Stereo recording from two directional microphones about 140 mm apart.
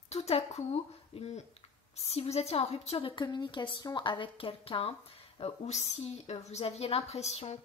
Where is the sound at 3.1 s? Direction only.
35° left (ahead or behind).